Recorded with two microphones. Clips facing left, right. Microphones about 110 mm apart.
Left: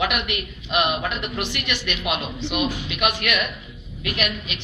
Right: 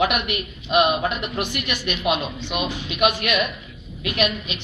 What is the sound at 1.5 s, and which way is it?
A woman's voice, 40° right (ahead or behind).